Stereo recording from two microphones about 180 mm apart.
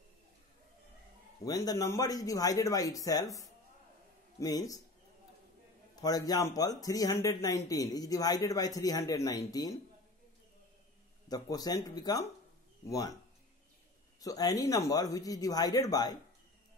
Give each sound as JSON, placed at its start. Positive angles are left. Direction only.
{"t": 1.4, "sound": "speech", "side_deg": 20}
{"t": 5.9, "sound": "speech", "side_deg": 20}
{"t": 11.2, "sound": "speech", "side_deg": 20}
{"t": 14.2, "sound": "speech", "side_deg": 20}